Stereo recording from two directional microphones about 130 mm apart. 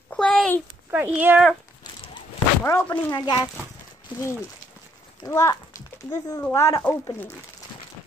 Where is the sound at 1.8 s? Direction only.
40° left (ahead or behind).